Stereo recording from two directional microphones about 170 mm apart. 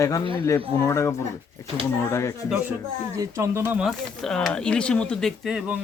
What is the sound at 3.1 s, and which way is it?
Speech, 15° right (ahead or behind).